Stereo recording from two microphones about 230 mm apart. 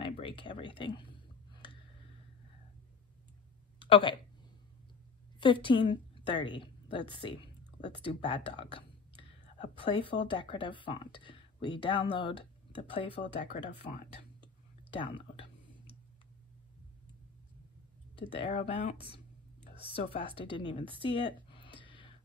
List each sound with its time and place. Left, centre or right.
0.0 s a sound: left
3.8 s speech: left
5.4 s a woman's voice: left
14.9 s speech: left
18.3 s speech: left
19.8 s speech: left
21.7 s gasp: left